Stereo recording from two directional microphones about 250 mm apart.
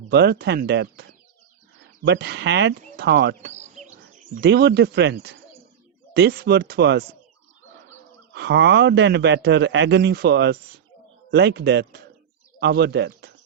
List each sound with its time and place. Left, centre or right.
0.1 s speech: right
2.0 s a man's voice: right
3.5 s bird: right
4.4 s speech: right
8.3 s a man's voice: right